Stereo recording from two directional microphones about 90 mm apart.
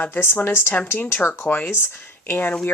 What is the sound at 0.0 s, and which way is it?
Speech, 25° left (ahead or behind).